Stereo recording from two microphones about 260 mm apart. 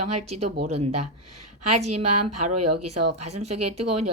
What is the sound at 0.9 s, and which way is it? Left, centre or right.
Speech, right.